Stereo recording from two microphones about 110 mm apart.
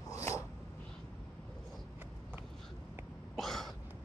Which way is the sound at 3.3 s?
Centre (ahead or behind).